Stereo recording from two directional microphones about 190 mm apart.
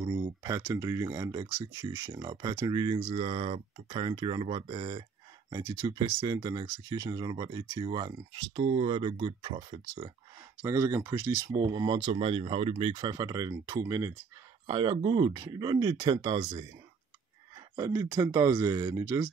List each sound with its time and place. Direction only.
0.0 s speech: 20° right (ahead or behind)
10.6 s speech: 15° right (ahead or behind)
17.7 s speech: 15° right (ahead or behind)